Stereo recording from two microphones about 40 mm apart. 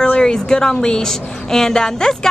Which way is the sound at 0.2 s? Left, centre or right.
Centre.